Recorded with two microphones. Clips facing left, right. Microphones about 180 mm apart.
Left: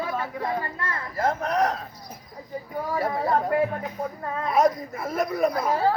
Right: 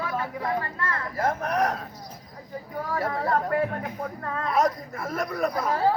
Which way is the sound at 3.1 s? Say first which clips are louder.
Left 2 dB; 20° left (ahead or behind).